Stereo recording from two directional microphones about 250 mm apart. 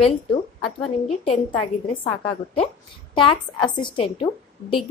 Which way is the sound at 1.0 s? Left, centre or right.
Left.